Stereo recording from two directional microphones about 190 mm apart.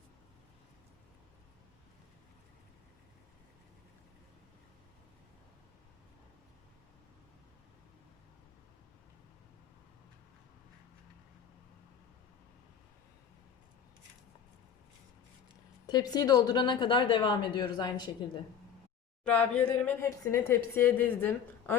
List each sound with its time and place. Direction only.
15.9 s a woman's voice: 20° left (ahead or behind)
19.2 s speech: 5° left (ahead or behind)